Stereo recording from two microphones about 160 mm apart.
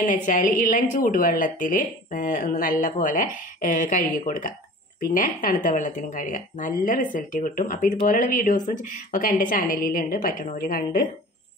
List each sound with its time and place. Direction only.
0.0 s a woman's voice: 50° left (ahead or behind)